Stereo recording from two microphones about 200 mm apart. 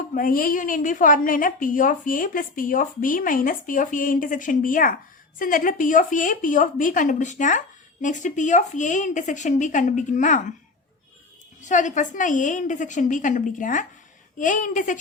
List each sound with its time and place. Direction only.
0.1 s a woman's voice: 45° left (ahead or behind)
11.6 s speech: 40° left (ahead or behind)